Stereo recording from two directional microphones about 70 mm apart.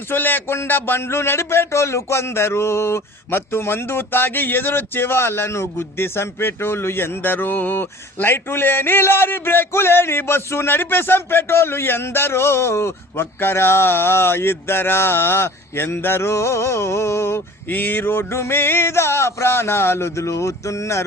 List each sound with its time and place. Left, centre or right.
0.1 s speech: left